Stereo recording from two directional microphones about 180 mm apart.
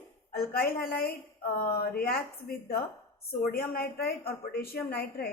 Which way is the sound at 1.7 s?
55° left (ahead or behind).